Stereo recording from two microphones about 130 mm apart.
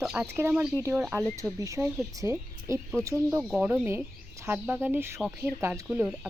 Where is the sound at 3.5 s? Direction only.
10° right (ahead or behind).